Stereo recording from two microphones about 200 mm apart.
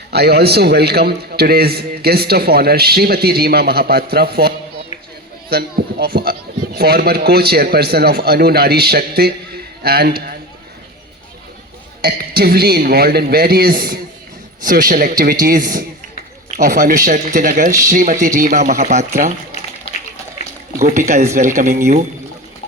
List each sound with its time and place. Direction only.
0.1 s a man's voice: 55° right (ahead or behind)
12.0 s a man's voice: 50° right (ahead or behind)
20.8 s speech: 35° right (ahead or behind)